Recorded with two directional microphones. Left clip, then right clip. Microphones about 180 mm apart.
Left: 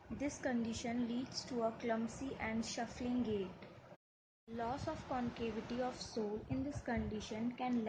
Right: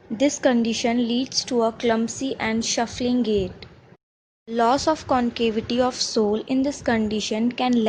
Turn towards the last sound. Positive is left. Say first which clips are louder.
# right 18 dB
turn(degrees=-55)  # may be behind; listen again after turning